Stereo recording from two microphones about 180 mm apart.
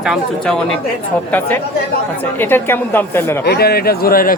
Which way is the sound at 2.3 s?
10° left (ahead or behind).